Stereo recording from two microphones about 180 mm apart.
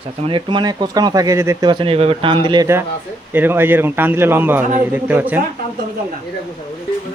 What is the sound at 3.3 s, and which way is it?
Speech, 10° right (ahead or behind).